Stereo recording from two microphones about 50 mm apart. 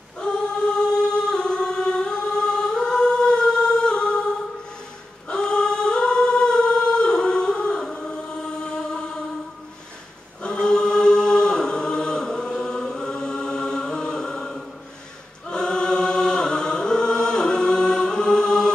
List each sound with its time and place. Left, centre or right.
0.2 s choir: centre
5.3 s a capella: centre
8.4 s chant: centre
10.4 s choir: centre